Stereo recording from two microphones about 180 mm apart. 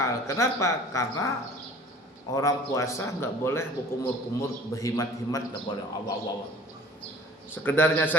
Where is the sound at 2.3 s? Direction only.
20° left (ahead or behind).